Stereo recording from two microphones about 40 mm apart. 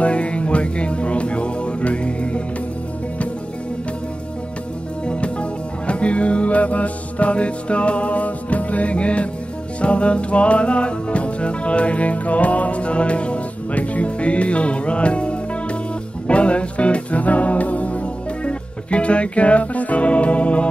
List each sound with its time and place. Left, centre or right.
0.0 s music: left
5.0 s music: left